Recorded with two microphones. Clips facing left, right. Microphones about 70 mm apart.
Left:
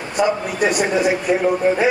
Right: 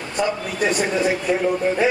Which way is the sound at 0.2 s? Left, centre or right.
Centre.